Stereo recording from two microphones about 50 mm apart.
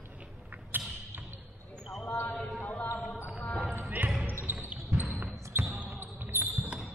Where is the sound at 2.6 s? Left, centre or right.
Left.